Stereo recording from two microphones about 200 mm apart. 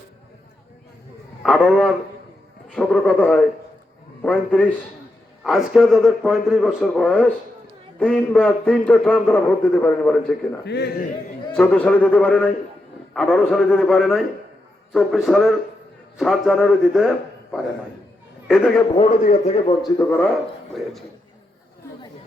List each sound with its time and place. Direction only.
1.4 s a man's voice: centre (ahead or behind)
10.7 s speech: 55° left (ahead or behind)
11.5 s a man's voice: 5° left (ahead or behind)
18.4 s a man's voice: centre (ahead or behind)
18.9 s speech: 35° left (ahead or behind)
19.8 s a man's voice: 15° left (ahead or behind)